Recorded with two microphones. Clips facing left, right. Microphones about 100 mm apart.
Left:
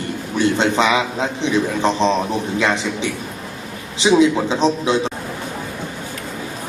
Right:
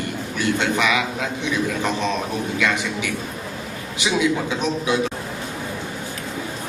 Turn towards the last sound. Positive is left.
turn(degrees=30)  # may be behind; listen again after turning